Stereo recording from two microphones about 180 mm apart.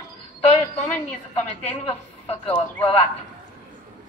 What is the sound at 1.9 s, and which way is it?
Speech, 30° left (ahead or behind).